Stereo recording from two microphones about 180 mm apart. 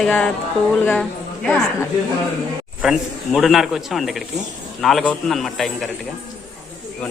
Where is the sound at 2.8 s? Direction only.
Centre (ahead or behind).